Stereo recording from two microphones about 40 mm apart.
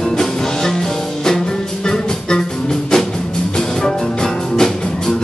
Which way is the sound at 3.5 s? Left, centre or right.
Centre.